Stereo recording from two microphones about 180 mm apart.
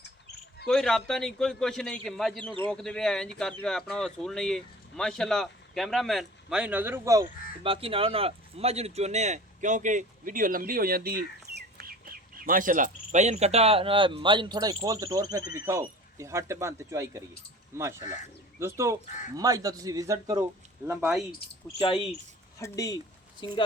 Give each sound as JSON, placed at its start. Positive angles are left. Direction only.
{"t": 0.6, "sound": "speech", "side_deg": 5}
{"t": 7.6, "sound": "a man's voice", "side_deg": -30}
{"t": 21.8, "sound": "speech", "side_deg": 30}
{"t": 22.5, "sound": "speech", "side_deg": 20}